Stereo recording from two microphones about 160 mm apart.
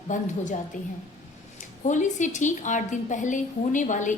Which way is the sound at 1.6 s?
50° left (ahead or behind).